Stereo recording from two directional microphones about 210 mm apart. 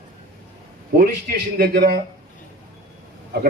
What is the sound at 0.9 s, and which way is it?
A man's voice, 45° right (ahead or behind).